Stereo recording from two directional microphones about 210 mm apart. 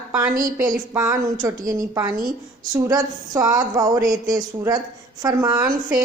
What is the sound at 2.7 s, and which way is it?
Speech, 15° right (ahead or behind).